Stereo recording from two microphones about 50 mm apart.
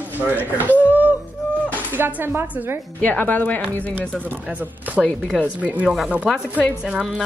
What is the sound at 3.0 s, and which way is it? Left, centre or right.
Speech, left.